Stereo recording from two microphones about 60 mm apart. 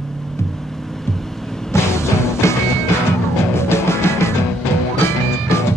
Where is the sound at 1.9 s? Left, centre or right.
Left.